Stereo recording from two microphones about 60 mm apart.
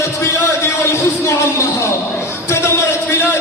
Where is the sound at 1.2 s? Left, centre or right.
Left.